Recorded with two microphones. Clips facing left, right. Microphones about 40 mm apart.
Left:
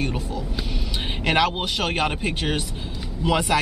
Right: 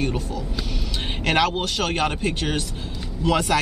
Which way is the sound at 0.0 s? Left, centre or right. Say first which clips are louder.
Right 1 dB; centre.